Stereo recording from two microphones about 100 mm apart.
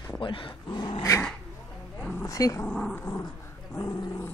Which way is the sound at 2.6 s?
15° left (ahead or behind).